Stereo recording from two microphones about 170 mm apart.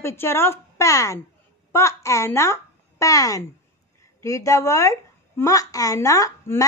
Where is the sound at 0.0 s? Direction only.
15° left (ahead or behind).